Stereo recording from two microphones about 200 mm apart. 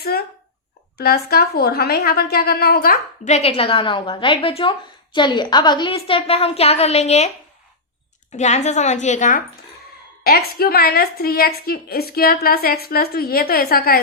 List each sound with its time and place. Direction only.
0.0 s a sound: 50° left (ahead or behind)
0.9 s a woman's voice: 50° left (ahead or behind); by 7.3 s 35° left (ahead or behind)
8.3 s a woman's voice: 35° left (ahead or behind)
10.2 s a woman's voice: 50° left (ahead or behind)